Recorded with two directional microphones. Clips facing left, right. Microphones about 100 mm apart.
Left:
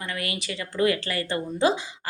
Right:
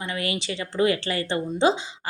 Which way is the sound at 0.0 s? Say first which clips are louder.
Right 3 dB; 25° right (ahead or behind).